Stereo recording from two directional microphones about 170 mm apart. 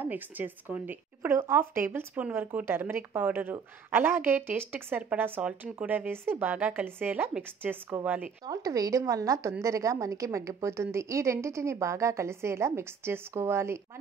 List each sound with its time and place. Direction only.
0.0 s a woman's voice: 10° right (ahead or behind)
8.5 s a woman's voice: 20° right (ahead or behind)